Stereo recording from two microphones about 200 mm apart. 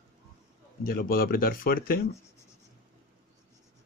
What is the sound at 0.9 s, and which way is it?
Speech, 50° left (ahead or behind).